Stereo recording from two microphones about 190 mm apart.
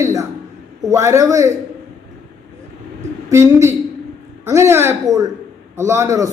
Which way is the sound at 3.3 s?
15° right (ahead or behind).